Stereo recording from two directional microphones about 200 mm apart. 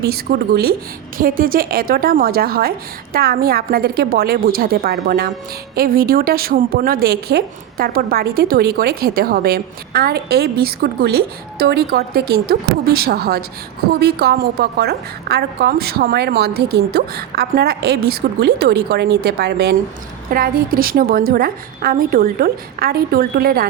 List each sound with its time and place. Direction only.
0.0 s a woman's voice: 50° right (ahead or behind)